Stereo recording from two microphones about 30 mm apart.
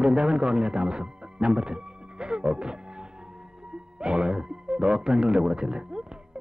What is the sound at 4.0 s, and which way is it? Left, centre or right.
Music, right.